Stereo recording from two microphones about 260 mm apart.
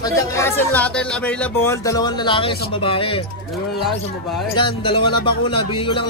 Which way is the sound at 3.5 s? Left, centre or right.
Centre.